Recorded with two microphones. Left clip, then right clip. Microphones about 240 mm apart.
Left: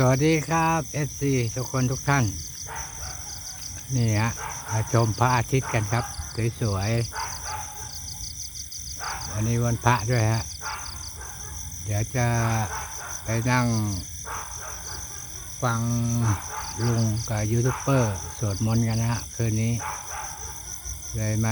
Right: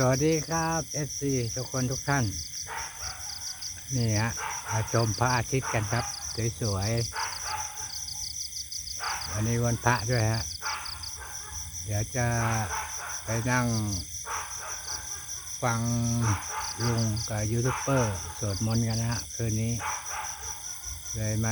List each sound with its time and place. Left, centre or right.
0.0 s speech: centre
3.9 s cricket: centre
9.4 s cricket: centre
11.9 s cricket: centre
15.6 s cricket: centre
16.2 s a sound: right
16.8 s cricket: centre
19.8 s a sound: right
21.2 s cricket: centre